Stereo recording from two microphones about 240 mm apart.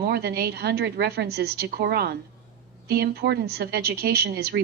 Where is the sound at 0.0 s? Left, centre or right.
Right.